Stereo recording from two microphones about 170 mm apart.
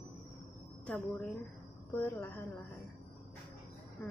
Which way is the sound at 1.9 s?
10° left (ahead or behind).